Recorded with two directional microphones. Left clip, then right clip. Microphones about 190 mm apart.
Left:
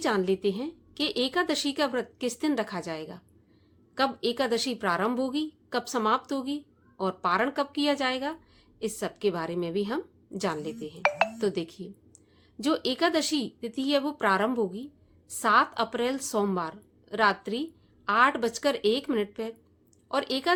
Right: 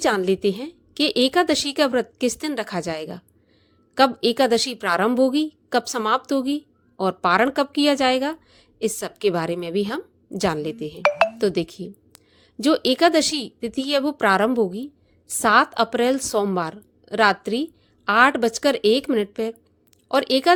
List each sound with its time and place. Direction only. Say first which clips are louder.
0.0 s a woman's voice: right 6 dB; 35° right (ahead or behind)